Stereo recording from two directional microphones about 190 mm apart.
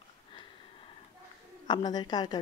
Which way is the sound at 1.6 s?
20° left (ahead or behind).